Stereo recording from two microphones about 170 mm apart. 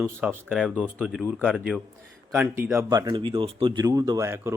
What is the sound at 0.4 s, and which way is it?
Speech, centre (ahead or behind).